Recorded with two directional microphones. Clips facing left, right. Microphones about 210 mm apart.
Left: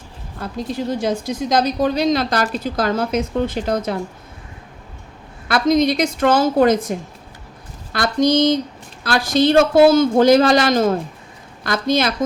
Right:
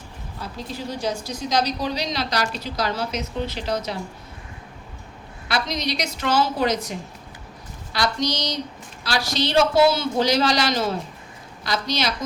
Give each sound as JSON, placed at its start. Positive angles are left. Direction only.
{"t": 0.9, "sound": "a woman's voice", "side_deg": 50}
{"t": 5.5, "sound": "a woman's voice", "side_deg": 50}
{"t": 7.9, "sound": "a woman's voice", "side_deg": 50}